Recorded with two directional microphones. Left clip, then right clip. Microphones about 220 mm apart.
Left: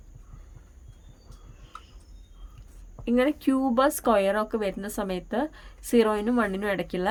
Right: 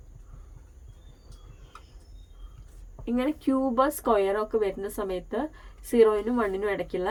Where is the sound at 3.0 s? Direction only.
50° left (ahead or behind).